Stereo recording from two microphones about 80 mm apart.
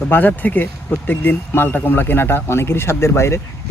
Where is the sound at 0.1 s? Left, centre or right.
Left.